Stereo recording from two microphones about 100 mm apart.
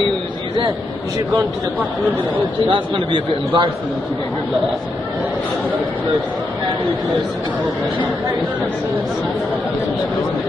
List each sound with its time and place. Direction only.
2.6 s a man's voice: 60° right (ahead or behind)